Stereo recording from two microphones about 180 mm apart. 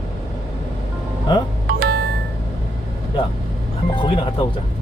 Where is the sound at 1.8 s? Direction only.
60° right (ahead or behind).